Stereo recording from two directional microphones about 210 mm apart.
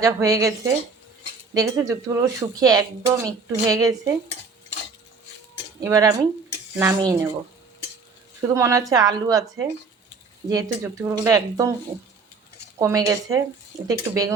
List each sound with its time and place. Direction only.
0.0 s speech: 15° right (ahead or behind)
5.8 s speech: 15° right (ahead or behind)
8.4 s speech: 15° right (ahead or behind)
12.8 s speech: 15° right (ahead or behind)